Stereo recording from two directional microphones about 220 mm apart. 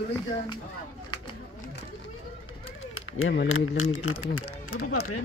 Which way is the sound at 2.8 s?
65° left (ahead or behind).